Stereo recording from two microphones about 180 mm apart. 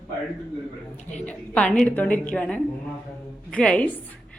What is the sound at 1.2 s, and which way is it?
A woman's voice, 5° left (ahead or behind).